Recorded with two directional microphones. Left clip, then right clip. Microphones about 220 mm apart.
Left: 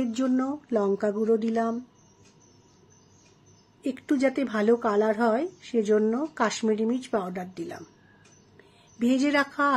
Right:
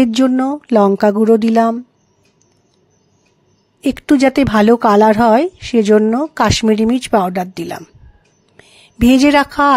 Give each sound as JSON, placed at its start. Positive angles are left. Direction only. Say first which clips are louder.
{"t": 0.0, "sound": "speech", "louder": "right 14 dB", "side_deg": -40}
{"t": 3.8, "sound": "speech", "louder": "right 13 dB", "side_deg": -40}